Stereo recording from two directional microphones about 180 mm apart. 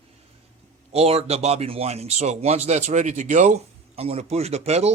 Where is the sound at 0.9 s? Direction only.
35° right (ahead or behind).